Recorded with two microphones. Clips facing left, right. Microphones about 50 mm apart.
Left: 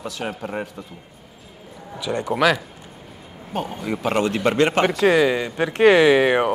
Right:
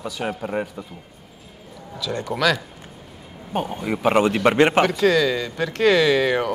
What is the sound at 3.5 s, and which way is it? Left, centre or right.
A man's voice, centre.